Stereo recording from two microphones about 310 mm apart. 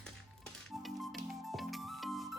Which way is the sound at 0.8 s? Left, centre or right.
Centre.